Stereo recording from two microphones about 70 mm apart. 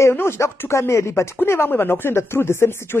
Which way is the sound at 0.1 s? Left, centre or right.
Left.